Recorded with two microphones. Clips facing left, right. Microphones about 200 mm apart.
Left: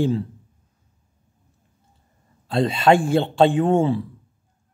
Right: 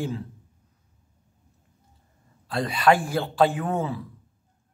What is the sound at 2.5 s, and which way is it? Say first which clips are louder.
Mantra: left 4 dB; 25° left (ahead or behind).